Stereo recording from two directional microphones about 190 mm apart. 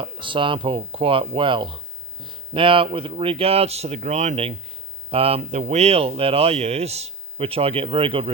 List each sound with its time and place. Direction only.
0.0 s speech: 25° right (ahead or behind)